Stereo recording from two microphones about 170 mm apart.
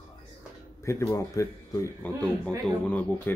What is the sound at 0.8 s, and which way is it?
Speech, 15° left (ahead or behind).